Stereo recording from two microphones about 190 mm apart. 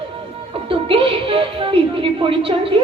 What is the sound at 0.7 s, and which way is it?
Speech, 30° right (ahead or behind).